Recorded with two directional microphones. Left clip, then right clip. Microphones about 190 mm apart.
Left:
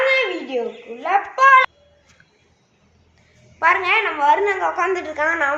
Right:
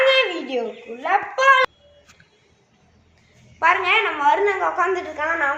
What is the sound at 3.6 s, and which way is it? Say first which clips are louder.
A woman's voice: left 1 dB; 10° left (ahead or behind).